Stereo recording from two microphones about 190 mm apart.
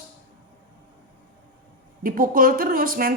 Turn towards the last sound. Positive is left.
turn(degrees=-50)  # may be behind; listen again after turning